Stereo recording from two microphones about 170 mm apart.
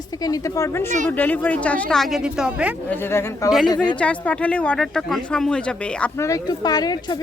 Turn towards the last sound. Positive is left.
turn(degrees=25)  # may be behind; listen again after turning